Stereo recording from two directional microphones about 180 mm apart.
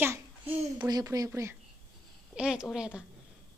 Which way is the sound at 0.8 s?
20° right (ahead or behind).